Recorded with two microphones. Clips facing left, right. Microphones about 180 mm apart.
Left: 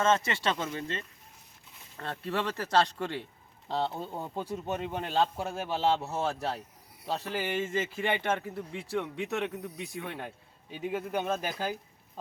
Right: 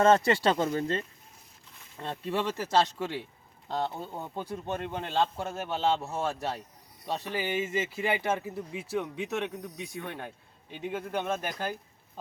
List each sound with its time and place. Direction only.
0.0 s speech: 35° right (ahead or behind)
2.0 s speech: 15° right (ahead or behind)
3.7 s a man's voice: 5° left (ahead or behind)
6.0 s speech: 15° right (ahead or behind)
6.2 s a man's voice: centre (ahead or behind)
7.3 s a man's voice: 5° right (ahead or behind)